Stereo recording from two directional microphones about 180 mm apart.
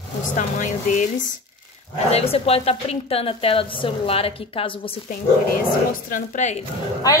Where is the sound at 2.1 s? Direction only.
35° left (ahead or behind).